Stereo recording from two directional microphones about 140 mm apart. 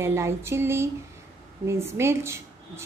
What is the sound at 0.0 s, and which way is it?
A woman's voice, 20° right (ahead or behind).